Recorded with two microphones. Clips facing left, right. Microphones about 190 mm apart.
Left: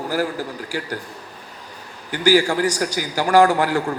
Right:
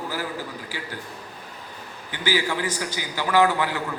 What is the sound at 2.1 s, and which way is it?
A man's voice, 45° left (ahead or behind).